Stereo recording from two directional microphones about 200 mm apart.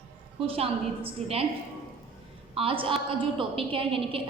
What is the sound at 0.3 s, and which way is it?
A woman's voice, 30° right (ahead or behind).